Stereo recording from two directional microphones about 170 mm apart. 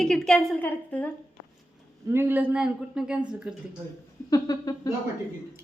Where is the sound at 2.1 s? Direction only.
15° right (ahead or behind).